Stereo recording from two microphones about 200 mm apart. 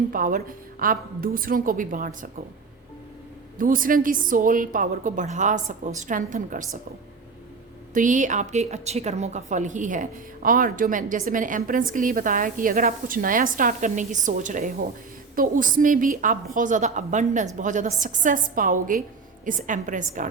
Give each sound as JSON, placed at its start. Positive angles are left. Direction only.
{"t": 0.1, "sound": "a woman's voice", "side_deg": -45}
{"t": 3.6, "sound": "a woman's voice", "side_deg": -45}
{"t": 7.9, "sound": "a woman's voice", "side_deg": -40}